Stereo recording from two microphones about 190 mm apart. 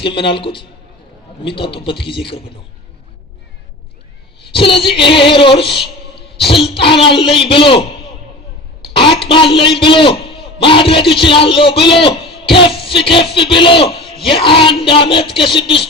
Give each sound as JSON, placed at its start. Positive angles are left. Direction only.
{"t": 0.0, "sound": "a man's voice", "side_deg": 25}
{"t": 4.5, "sound": "a man's voice", "side_deg": 30}
{"t": 8.8, "sound": "a sound", "side_deg": 30}
{"t": 9.3, "sound": "a man's voice", "side_deg": 25}